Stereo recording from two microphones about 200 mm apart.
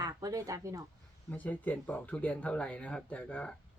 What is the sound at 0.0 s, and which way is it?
Speech, 20° right (ahead or behind).